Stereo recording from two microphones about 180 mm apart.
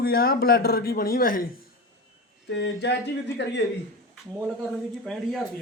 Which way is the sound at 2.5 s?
75° left (ahead or behind).